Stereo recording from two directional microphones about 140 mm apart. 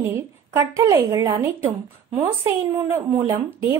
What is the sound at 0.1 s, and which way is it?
A woman's voice, 20° right (ahead or behind).